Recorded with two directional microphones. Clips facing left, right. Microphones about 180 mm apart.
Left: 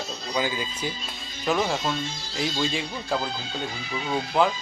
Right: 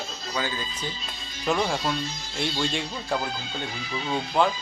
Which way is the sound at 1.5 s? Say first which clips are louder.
Even; centre (ahead or behind).